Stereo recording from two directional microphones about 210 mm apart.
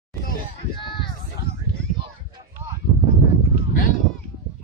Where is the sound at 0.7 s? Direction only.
25° left (ahead or behind).